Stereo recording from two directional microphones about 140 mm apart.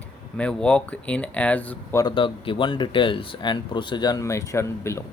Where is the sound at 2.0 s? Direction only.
35° left (ahead or behind).